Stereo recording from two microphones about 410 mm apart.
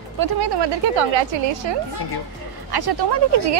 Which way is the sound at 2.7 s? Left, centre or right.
Right.